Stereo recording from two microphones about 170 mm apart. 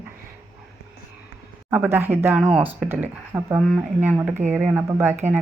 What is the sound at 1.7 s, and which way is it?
Speech, 10° right (ahead or behind).